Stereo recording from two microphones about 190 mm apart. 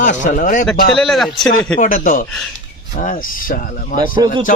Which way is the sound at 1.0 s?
Centre (ahead or behind).